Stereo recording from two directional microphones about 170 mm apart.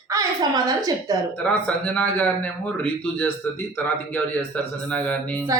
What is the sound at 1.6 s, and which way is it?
A man's voice, 10° left (ahead or behind).